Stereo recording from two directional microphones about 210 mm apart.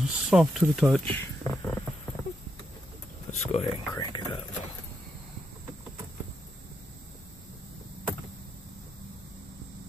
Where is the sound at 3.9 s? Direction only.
20° left (ahead or behind).